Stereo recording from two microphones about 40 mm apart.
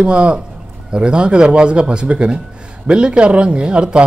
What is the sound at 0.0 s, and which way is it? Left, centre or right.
Speech, right.